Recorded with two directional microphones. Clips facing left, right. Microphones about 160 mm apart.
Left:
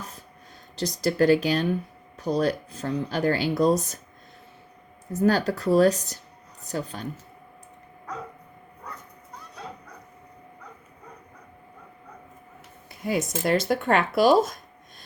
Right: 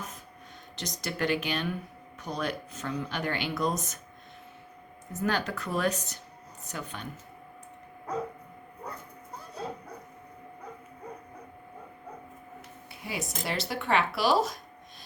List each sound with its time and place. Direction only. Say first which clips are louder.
0.8 s speech: left 10 dB; 35° left (ahead or behind)
5.1 s speech: left 8 dB; 35° left (ahead or behind)
13.0 s speech: left 10 dB; 45° left (ahead or behind)